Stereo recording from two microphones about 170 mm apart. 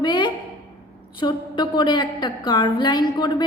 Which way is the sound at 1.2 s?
25° left (ahead or behind).